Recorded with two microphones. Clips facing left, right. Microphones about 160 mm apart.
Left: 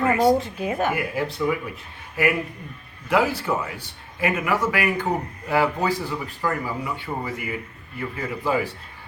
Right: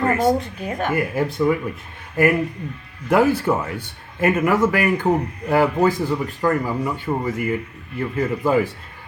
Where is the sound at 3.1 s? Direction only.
50° right (ahead or behind).